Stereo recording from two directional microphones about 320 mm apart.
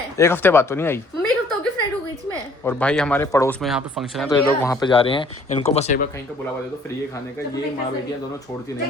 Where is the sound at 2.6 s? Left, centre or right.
Centre; by 6.0 s left.